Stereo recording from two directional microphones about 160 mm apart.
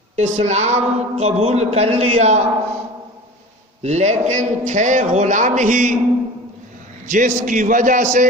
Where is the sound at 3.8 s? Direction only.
45° right (ahead or behind).